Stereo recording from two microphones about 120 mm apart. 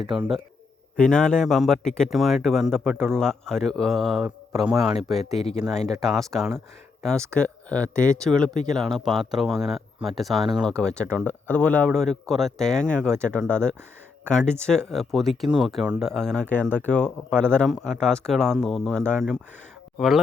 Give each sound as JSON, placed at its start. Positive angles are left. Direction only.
{"t": 0.1, "sound": "speech", "side_deg": 0}
{"t": 5.4, "sound": "speech", "side_deg": 65}
{"t": 5.6, "sound": "speech", "side_deg": 5}